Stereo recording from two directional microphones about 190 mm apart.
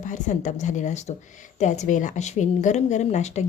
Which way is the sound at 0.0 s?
40° left (ahead or behind).